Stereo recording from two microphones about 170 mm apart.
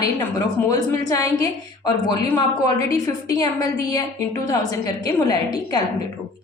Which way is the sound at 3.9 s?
20° left (ahead or behind).